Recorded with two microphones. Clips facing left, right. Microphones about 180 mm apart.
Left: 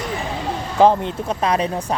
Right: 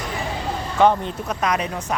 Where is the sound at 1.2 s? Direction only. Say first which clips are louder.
Left 3 dB; 30° left (ahead or behind).